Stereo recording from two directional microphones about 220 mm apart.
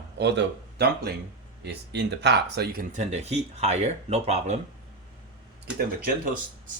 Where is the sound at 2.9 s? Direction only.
30° right (ahead or behind).